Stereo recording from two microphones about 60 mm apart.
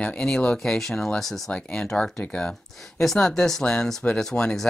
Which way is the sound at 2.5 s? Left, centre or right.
Centre.